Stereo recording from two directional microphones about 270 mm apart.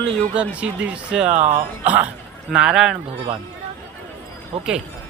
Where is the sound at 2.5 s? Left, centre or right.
Centre.